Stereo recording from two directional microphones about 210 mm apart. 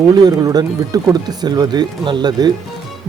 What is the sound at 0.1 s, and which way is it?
A man's voice, 20° right (ahead or behind).